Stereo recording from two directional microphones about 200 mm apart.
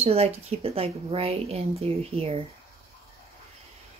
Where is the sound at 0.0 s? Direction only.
30° right (ahead or behind).